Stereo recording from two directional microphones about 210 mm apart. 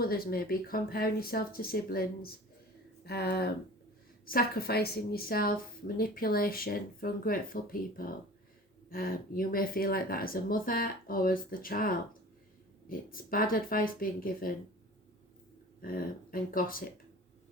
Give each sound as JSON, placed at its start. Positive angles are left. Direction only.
{"t": 0.0, "sound": "speech", "side_deg": 45}
{"t": 15.8, "sound": "speech", "side_deg": 45}